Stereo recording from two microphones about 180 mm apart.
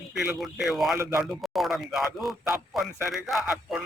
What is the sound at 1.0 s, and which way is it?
Speech, 15° right (ahead or behind).